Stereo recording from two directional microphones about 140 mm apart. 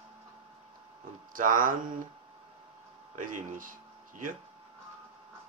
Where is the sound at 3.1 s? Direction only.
70° right (ahead or behind).